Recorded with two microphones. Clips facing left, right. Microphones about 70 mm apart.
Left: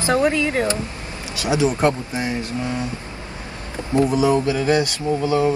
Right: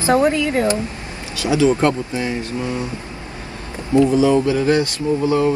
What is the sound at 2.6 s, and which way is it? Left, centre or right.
Speech, right.